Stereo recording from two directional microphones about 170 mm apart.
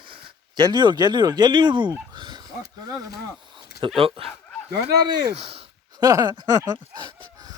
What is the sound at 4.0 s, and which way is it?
Speech, 35° right (ahead or behind).